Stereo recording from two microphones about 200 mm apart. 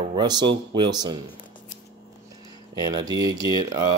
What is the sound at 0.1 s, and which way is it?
Speech, 20° right (ahead or behind).